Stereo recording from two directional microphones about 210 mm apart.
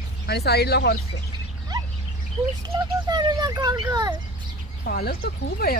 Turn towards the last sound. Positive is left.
turn(degrees=45)  # may be behind; listen again after turning